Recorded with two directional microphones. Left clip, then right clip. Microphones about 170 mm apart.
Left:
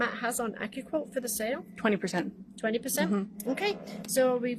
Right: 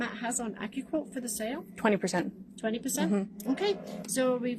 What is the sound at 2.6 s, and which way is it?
A woman's voice, 45° left (ahead or behind).